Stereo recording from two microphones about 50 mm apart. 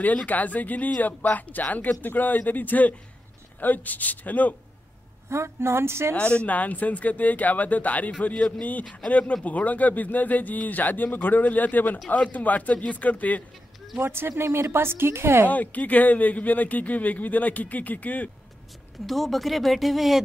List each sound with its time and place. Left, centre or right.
0.0 s speech: left
5.3 s a woman's voice: right
6.1 s a man's voice: left
13.9 s a woman's voice: right
15.4 s speech: left
19.0 s speech: centre